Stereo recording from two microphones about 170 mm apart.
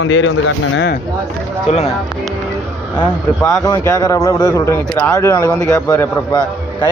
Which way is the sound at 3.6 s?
20° left (ahead or behind).